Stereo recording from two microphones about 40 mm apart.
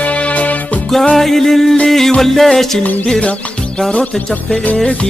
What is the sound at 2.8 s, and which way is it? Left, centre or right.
Music, left.